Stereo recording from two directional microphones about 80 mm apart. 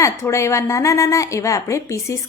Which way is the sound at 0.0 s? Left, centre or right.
Left.